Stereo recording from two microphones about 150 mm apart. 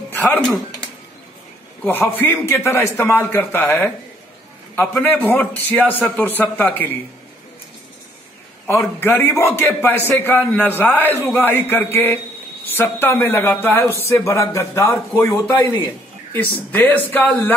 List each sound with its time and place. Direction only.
0.1 s speech: 10° left (ahead or behind)
2.1 s a man's voice: 15° left (ahead or behind)
8.6 s a man's voice: 15° left (ahead or behind)